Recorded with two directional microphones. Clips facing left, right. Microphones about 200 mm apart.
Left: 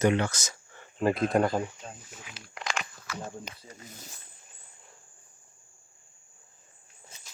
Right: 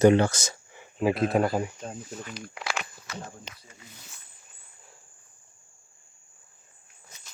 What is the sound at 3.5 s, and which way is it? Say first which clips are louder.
Speech: left 4 dB; 40° left (ahead or behind).